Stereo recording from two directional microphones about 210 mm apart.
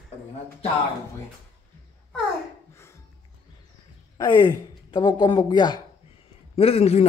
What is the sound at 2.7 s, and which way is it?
Music, 10° left (ahead or behind).